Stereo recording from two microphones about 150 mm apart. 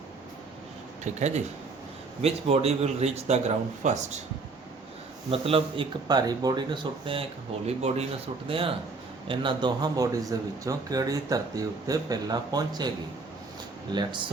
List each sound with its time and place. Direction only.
1.0 s speech: 50° right (ahead or behind)
5.3 s speech: 40° right (ahead or behind)
13.9 s speech: 30° right (ahead or behind)